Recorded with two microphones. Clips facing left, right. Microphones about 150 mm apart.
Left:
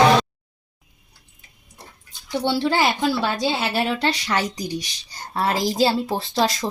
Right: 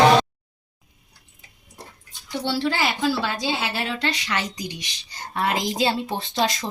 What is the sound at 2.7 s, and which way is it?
Speech, 25° left (ahead or behind).